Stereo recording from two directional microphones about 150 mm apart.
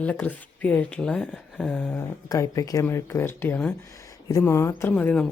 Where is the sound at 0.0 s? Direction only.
10° left (ahead or behind).